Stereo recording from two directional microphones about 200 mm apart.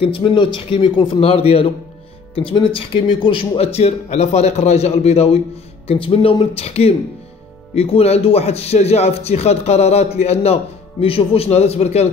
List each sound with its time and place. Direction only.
0.0 s a man's voice: 25° left (ahead or behind)